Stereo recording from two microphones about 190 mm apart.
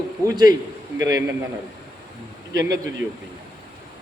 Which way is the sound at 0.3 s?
20° right (ahead or behind).